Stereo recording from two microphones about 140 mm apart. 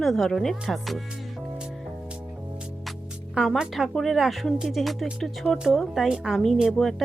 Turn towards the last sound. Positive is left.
turn(degrees=0)  # may be behind; listen again after turning